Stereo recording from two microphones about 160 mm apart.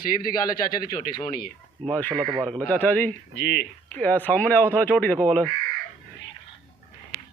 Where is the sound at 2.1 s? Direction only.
25° right (ahead or behind).